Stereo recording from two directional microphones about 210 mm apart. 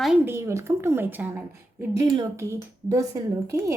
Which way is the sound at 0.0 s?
5° right (ahead or behind).